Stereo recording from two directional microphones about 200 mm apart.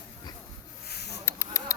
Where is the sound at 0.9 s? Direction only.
55° left (ahead or behind).